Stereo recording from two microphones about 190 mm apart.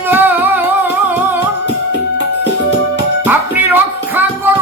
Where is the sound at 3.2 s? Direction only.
10° right (ahead or behind).